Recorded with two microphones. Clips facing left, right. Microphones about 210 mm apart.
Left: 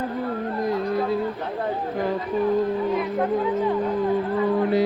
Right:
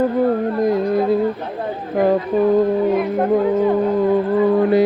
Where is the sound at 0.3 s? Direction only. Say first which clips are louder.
Right 8 dB; 45° right (ahead or behind).